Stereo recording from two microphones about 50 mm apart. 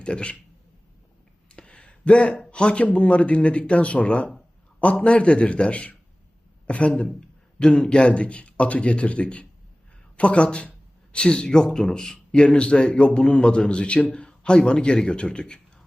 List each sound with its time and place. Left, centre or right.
0.0 s speech: left
1.5 s a sound: left
2.5 s speech: left